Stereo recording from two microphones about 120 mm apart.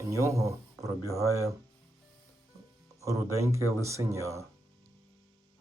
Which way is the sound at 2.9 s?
25° right (ahead or behind).